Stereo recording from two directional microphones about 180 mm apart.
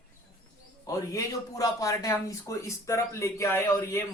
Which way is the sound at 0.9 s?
20° left (ahead or behind).